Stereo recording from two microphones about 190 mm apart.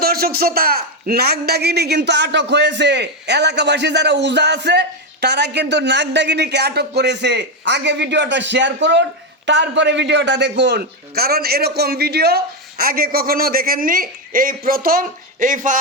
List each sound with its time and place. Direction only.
0.0 s a man's voice: 50° right (ahead or behind)